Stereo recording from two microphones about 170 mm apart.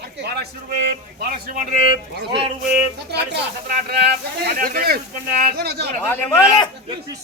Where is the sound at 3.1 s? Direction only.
80° right.